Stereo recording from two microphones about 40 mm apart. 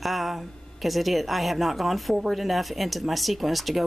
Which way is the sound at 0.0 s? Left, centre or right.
Centre.